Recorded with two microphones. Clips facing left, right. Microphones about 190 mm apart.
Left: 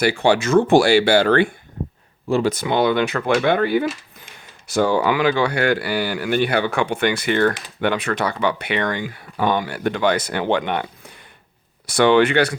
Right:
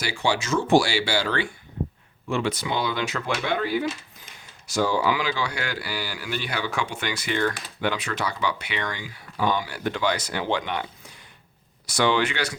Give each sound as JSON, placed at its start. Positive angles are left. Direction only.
{"t": 0.0, "sound": "speech", "side_deg": 55}
{"t": 2.3, "sound": "speech", "side_deg": 45}